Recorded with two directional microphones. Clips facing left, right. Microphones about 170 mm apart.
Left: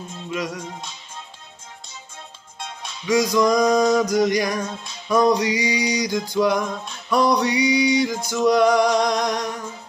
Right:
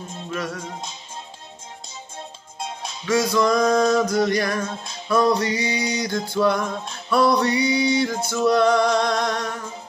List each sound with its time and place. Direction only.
0.3 s music: 15° left (ahead or behind)
3.1 s music: 15° left (ahead or behind)